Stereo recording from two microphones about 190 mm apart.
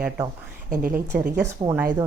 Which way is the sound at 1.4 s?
25° right (ahead or behind).